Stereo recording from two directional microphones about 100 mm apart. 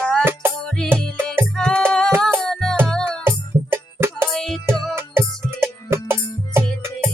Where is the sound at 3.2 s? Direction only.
25° right (ahead or behind).